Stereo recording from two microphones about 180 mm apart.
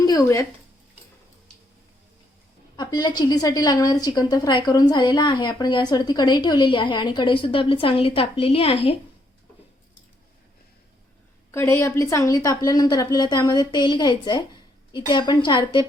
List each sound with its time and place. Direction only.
0.0 s a sound: 20° left (ahead or behind)
2.7 s a woman's voice: 25° left (ahead or behind)
11.5 s a woman's voice: 15° left (ahead or behind)